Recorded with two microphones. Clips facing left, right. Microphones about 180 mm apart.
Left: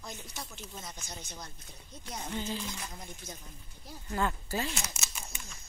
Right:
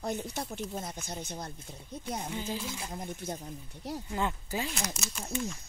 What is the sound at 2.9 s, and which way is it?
Speech, 60° right (ahead or behind).